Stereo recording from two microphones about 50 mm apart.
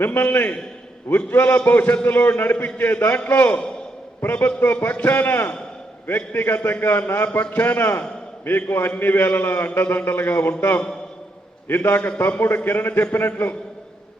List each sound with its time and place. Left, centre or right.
0.0 s a man's voice: left
11.7 s a man's voice: left
11.9 s a man's voice: left